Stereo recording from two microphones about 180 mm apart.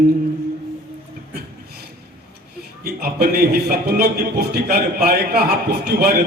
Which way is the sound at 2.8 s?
55° right (ahead or behind).